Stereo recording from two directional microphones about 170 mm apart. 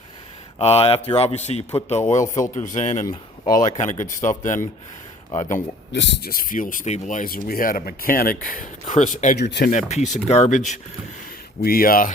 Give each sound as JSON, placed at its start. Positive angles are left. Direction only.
{"t": 0.6, "sound": "speech", "side_deg": 35}
{"t": 5.9, "sound": "speech", "side_deg": 90}
{"t": 9.4, "sound": "speech", "side_deg": 75}
{"t": 9.7, "sound": "speech", "side_deg": 45}
{"t": 11.6, "sound": "speech", "side_deg": 60}